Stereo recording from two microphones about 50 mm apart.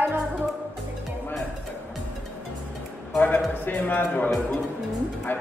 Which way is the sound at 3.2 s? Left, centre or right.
Left.